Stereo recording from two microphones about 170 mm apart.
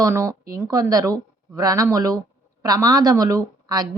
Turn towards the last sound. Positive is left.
turn(degrees=-20)  # may be behind; listen again after turning